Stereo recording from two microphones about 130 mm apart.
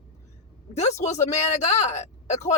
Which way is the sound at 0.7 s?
60° left (ahead or behind).